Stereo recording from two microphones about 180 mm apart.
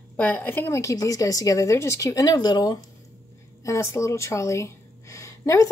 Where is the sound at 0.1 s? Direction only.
10° left (ahead or behind).